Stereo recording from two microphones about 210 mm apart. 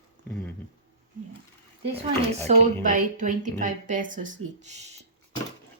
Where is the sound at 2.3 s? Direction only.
35° right (ahead or behind).